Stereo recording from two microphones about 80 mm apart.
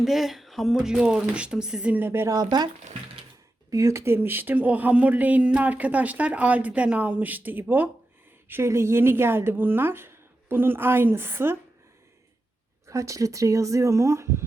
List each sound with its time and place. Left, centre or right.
0.0 s a woman's voice: centre
2.0 s speech: right
2.2 s speech: right
3.7 s speech: right
12.9 s speech: right